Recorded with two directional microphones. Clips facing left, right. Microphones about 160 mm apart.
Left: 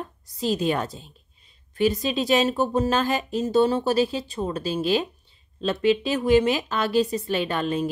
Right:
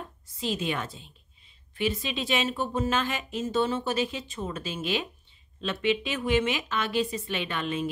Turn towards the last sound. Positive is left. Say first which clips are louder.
# left 5 dB
turn(degrees=40)  # may be behind; listen again after turning